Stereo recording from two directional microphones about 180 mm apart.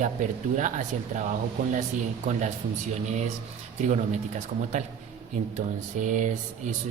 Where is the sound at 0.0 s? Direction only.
45° right (ahead or behind).